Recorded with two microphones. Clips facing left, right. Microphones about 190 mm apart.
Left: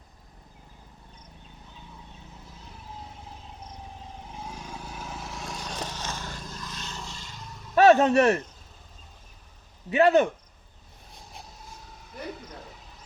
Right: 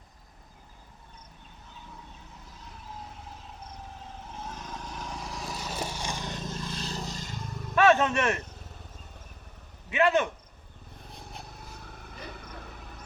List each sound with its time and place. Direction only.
4.2 s vehicle: 10° left (ahead or behind); by 7.4 s 45° right (ahead or behind)
7.8 s speech: 35° left (ahead or behind)
9.9 s speech: 35° left (ahead or behind)
11.5 s vehicle: 60° right (ahead or behind)